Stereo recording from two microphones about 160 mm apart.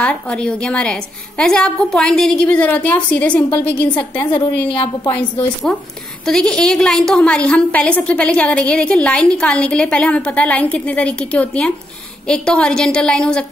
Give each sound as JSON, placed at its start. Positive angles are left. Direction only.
{"t": 0.0, "sound": "a woman's voice", "side_deg": 5}
{"t": 4.6, "sound": "a woman's voice", "side_deg": 30}
{"t": 5.1, "sound": "a woman's voice", "side_deg": 5}